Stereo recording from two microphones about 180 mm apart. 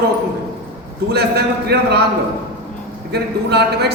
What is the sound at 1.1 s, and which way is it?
Speech, 65° right (ahead or behind).